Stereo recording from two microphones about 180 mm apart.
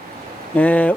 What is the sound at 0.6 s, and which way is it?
Speech, 10° left (ahead or behind).